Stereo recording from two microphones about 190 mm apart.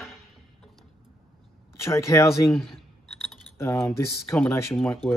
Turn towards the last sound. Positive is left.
turn(degrees=5)  # may be behind; listen again after turning